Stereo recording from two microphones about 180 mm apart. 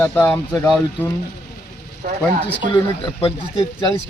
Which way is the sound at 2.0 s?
50° right (ahead or behind).